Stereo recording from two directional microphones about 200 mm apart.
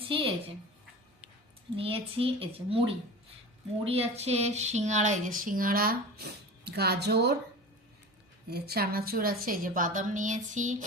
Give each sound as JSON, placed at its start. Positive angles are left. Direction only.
{"t": 0.1, "sound": "a child's voice", "side_deg": -25}
{"t": 1.7, "sound": "a child's voice", "side_deg": -25}
{"t": 3.8, "sound": "a sound", "side_deg": -30}
{"t": 6.7, "sound": "a woman's voice", "side_deg": -55}
{"t": 8.4, "sound": "a woman's voice", "side_deg": -50}